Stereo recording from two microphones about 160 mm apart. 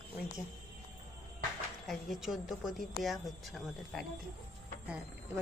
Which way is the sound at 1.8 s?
Centre (ahead or behind).